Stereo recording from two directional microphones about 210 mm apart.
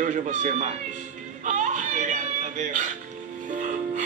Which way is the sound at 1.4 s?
35° right (ahead or behind).